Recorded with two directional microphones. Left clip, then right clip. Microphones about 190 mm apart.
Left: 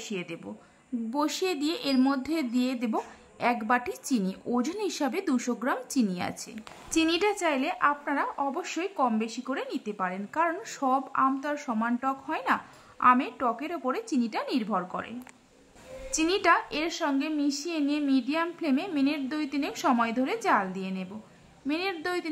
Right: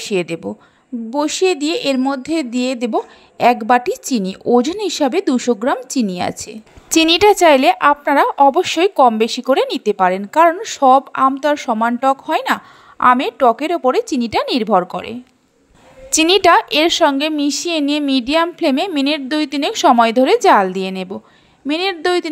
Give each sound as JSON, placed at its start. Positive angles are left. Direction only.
{"t": 0.0, "sound": "a woman's voice", "side_deg": -40}
{"t": 16.2, "sound": "a woman's voice", "side_deg": -45}